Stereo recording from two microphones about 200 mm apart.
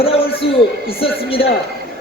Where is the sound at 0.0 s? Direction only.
30° left (ahead or behind).